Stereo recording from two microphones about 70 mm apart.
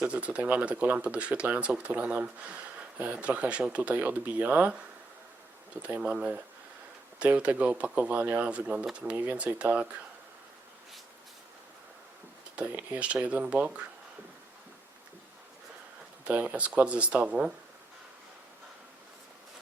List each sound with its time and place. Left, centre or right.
0.0 s speech: centre
6.0 s speech: centre
12.5 s speech: right
16.2 s speech: centre